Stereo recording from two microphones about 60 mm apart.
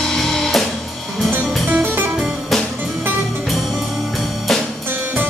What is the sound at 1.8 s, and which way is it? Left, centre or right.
Music, right.